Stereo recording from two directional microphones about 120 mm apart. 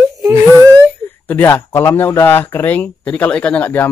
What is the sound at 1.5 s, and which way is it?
Speech, 25° left (ahead or behind).